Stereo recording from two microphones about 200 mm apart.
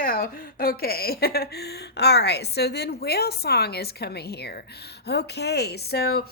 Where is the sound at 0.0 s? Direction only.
45° left (ahead or behind).